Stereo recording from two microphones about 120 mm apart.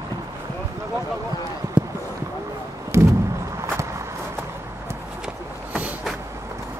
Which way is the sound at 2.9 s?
20° right (ahead or behind).